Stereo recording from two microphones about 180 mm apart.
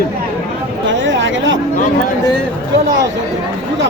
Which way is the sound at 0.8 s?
90° right.